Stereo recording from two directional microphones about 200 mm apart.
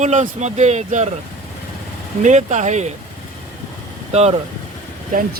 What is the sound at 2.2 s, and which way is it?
Speech, 35° right (ahead or behind).